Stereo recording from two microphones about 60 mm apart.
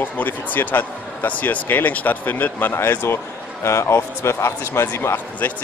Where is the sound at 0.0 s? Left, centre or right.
Left.